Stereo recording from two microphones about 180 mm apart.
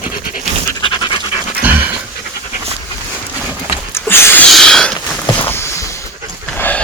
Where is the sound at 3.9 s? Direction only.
15° left (ahead or behind).